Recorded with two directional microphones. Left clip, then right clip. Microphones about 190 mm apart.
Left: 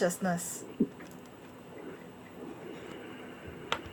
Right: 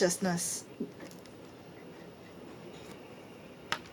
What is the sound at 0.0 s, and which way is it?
Speech, 55° right (ahead or behind).